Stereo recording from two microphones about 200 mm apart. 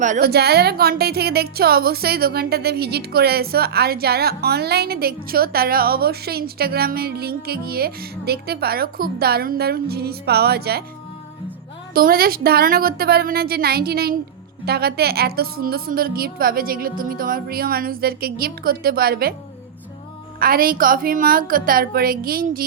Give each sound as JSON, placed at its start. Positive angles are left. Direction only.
{"t": 0.0, "sound": "a woman's voice", "side_deg": -45}
{"t": 11.9, "sound": "a woman's voice", "side_deg": -50}
{"t": 20.4, "sound": "a woman's voice", "side_deg": -45}